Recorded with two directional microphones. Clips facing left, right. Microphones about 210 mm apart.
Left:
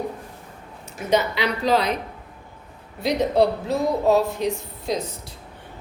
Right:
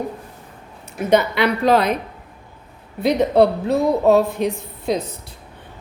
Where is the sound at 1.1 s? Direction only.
55° right (ahead or behind).